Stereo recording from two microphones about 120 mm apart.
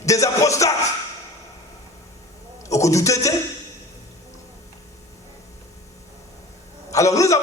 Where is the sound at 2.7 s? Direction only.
25° left (ahead or behind).